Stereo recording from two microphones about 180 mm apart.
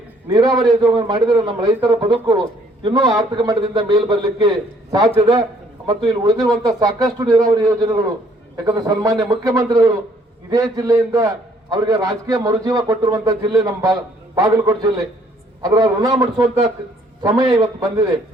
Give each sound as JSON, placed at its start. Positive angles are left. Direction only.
{"t": 0.3, "sound": "a man's voice", "side_deg": -20}